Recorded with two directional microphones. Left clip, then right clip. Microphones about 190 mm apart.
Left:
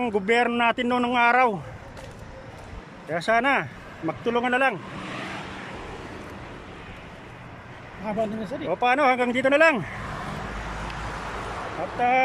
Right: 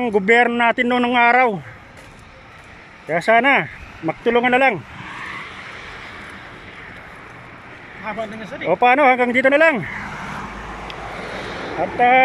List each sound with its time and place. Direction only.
0.0 s speech: centre (ahead or behind)
3.1 s speech: centre (ahead or behind)
5.0 s vehicle: 55° left (ahead or behind)
8.1 s speech: 30° left (ahead or behind)
8.6 s speech: 5° right (ahead or behind)
12.0 s speech: centre (ahead or behind)